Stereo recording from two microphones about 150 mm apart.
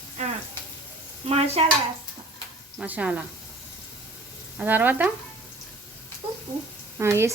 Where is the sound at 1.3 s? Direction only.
40° right (ahead or behind).